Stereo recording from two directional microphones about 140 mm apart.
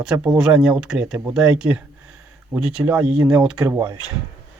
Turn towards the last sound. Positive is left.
turn(degrees=-20)  # may be behind; listen again after turning